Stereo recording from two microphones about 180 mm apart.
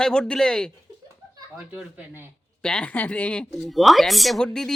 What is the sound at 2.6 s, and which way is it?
Speech, 5° left (ahead or behind).